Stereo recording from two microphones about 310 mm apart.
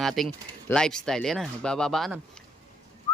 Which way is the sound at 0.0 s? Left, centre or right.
Centre.